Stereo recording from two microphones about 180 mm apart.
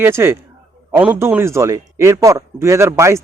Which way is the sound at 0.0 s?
15° right (ahead or behind).